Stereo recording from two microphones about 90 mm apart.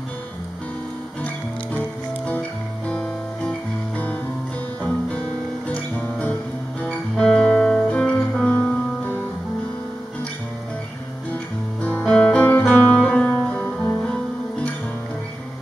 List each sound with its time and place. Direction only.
1.2 s music: 15° left (ahead or behind)
2.9 s guitar: 15° left (ahead or behind)
5.7 s music: 15° left (ahead or behind)
12.1 s music: 15° left (ahead or behind)